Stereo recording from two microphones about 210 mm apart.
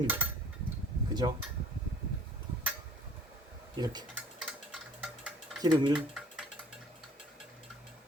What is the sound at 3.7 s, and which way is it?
Speech, 20° right (ahead or behind).